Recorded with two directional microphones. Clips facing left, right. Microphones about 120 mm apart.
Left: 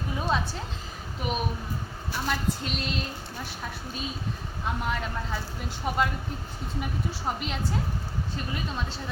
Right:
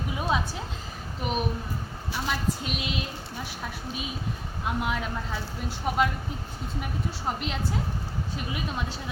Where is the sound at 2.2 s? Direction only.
5° right (ahead or behind).